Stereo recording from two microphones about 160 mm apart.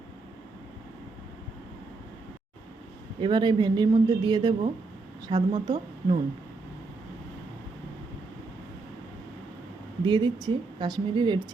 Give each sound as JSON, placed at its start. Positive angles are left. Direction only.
{"t": 3.2, "sound": "speech", "side_deg": -30}
{"t": 10.0, "sound": "speech", "side_deg": -30}